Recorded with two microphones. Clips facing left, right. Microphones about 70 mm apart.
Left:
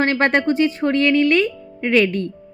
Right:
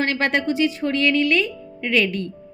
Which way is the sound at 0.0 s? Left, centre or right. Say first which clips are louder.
Left 4 dB; left.